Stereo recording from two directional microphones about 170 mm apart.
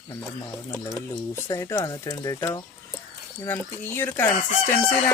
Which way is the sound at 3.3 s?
10° left (ahead or behind).